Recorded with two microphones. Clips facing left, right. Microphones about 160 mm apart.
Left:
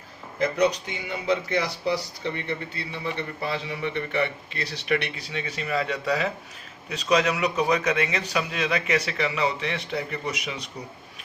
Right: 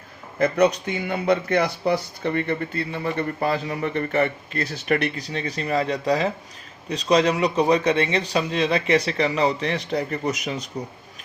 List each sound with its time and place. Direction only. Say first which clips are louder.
0.3 s a man's voice: right 4 dB; 55° right (ahead or behind)